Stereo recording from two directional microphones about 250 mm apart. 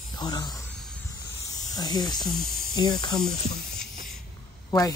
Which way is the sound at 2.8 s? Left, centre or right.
Centre.